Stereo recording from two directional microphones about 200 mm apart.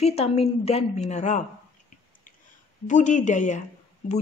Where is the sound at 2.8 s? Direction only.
40° left (ahead or behind).